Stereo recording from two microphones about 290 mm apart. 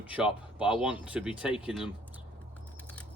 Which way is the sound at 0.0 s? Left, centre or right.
Centre.